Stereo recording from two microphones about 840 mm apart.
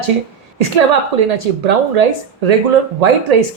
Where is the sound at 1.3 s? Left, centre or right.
Right.